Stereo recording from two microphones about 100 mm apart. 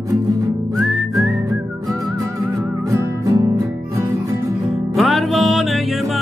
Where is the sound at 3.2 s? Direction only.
40° right (ahead or behind).